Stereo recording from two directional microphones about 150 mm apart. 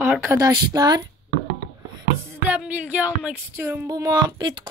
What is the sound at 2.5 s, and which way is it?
Speech, 10° right (ahead or behind).